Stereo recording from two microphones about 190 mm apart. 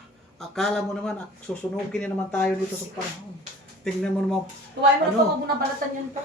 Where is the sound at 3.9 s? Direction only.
Centre (ahead or behind).